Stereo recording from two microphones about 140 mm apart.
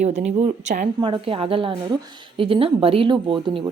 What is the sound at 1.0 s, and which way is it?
A woman's voice, 35° right (ahead or behind).